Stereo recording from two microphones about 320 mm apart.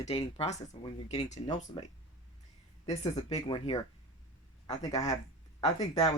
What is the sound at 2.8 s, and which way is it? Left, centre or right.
Speech, centre.